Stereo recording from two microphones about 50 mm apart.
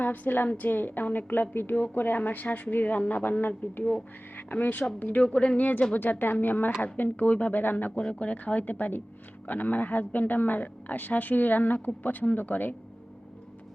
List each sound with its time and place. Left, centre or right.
0.0 s a woman's voice: left
4.5 s a woman's voice: left
5.9 s a woman's voice: left